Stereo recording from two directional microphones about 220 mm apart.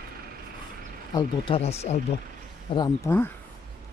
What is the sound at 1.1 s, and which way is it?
Speech, 20° left (ahead or behind).